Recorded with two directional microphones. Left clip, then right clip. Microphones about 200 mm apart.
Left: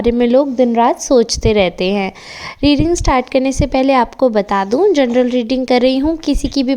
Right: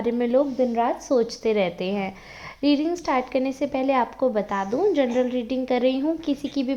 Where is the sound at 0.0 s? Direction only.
45° left (ahead or behind).